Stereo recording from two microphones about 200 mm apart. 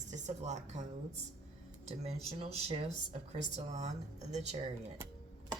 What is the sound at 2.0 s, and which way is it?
Speech, 30° right (ahead or behind).